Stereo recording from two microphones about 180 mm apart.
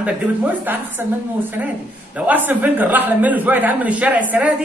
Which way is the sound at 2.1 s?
10° right (ahead or behind).